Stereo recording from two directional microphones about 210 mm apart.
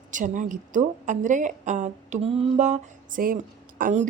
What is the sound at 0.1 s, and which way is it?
A woman's voice, 40° right (ahead or behind).